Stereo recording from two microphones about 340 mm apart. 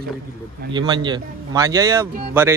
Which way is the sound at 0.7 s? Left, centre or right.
Centre.